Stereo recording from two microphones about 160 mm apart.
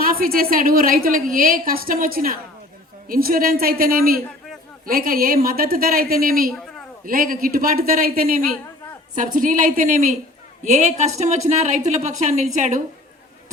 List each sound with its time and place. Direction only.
0.0 s a woman's voice: 65° right (ahead or behind)
9.1 s a woman's voice: 55° right (ahead or behind)